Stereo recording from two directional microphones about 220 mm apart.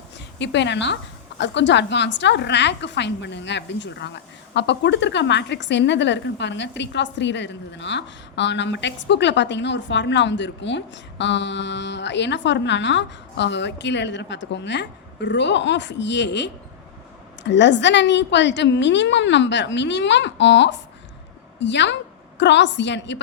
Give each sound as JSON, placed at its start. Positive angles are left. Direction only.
{"t": 0.3, "sound": "a woman's voice", "side_deg": 55}